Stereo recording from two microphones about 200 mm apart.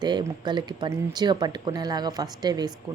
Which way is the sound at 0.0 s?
20° right (ahead or behind).